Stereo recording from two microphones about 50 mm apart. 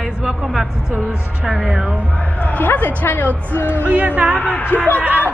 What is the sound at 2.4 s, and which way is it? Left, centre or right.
Speech, left.